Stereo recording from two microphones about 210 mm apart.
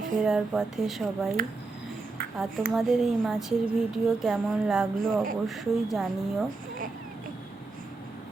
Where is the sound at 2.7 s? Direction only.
Centre (ahead or behind).